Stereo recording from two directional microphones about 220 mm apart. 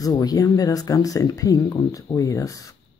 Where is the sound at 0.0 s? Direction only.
15° left (ahead or behind).